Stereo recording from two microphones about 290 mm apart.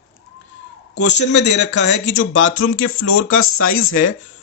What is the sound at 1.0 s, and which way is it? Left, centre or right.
Speech, left.